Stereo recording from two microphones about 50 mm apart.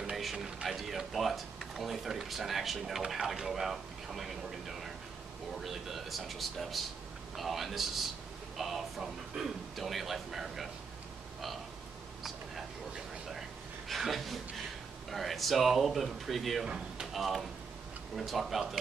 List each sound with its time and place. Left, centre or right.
0.1 s speech: centre
13.3 s a sound: centre
15.0 s speech: centre
16.6 s speech: centre
17.1 s speech: centre